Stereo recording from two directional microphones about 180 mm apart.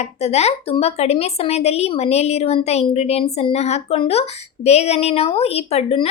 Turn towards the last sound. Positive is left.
turn(degrees=35)  # may be behind; listen again after turning